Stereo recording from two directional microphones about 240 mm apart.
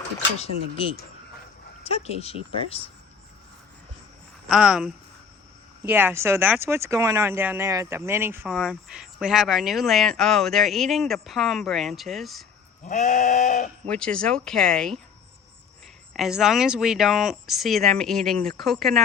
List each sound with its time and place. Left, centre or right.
1.8 s speech: left
4.4 s speech: centre
12.8 s goat: left
13.8 s speech: centre
16.1 s speech: centre